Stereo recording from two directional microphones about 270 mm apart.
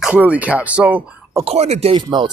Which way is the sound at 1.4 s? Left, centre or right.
Right.